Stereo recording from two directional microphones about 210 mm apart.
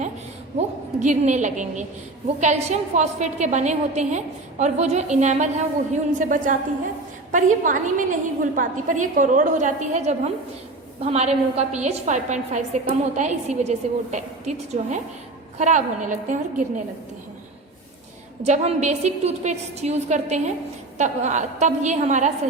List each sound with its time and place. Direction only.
0.9 s a woman's voice: 35° right (ahead or behind)
18.4 s a woman's voice: 35° right (ahead or behind)